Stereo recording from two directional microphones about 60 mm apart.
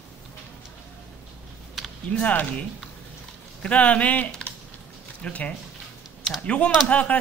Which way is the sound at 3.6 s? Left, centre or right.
Left.